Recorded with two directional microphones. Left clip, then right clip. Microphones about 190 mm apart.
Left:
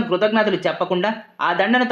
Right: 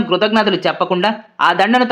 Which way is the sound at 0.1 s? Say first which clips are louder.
Right 4 dB; 25° right (ahead or behind).